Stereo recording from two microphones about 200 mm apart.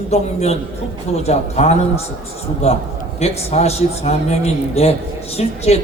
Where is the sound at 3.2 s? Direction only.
30° left (ahead or behind).